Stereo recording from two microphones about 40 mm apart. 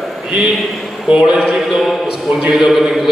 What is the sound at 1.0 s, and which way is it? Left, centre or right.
Speech, right.